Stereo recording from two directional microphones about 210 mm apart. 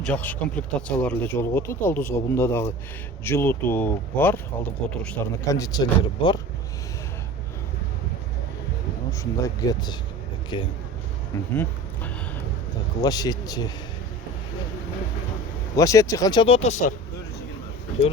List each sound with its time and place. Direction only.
0.0 s speech: 5° left (ahead or behind)
9.4 s speech: 20° left (ahead or behind)
11.5 s vehicle: 10° left (ahead or behind)
13.0 s speech: 20° left (ahead or behind)
15.7 s speech: 15° left (ahead or behind); by 16.9 s 30° left (ahead or behind)